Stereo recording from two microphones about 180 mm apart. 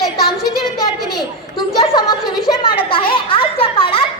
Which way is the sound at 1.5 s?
30° left (ahead or behind).